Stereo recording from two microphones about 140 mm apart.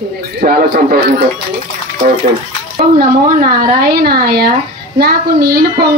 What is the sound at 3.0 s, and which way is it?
Speech, 90° right.